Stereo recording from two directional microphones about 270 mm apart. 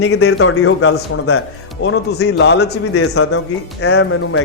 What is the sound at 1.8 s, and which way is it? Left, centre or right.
Speech, left.